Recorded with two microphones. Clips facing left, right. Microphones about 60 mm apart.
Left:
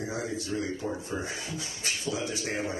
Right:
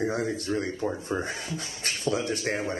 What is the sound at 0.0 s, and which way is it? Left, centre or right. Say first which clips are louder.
Speech: right 5 dB; right.